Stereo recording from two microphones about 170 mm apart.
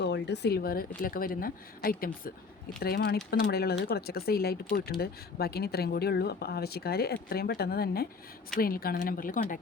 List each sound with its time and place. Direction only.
0.0 s a woman's voice: 80° left; by 9.6 s 55° left (ahead or behind)